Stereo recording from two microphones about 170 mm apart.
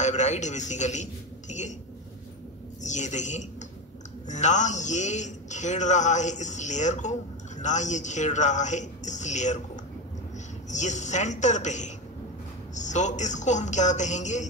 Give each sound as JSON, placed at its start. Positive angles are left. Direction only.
{"t": 0.0, "sound": "a man's voice", "side_deg": 45}
{"t": 2.8, "sound": "a man's voice", "side_deg": 45}
{"t": 10.7, "sound": "a man's voice", "side_deg": 45}